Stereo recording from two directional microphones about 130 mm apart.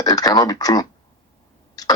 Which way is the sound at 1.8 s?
30° left (ahead or behind).